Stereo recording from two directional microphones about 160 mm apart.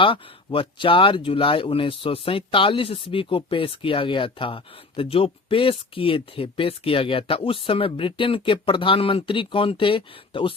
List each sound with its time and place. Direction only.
0.0 s speech: 35° left (ahead or behind)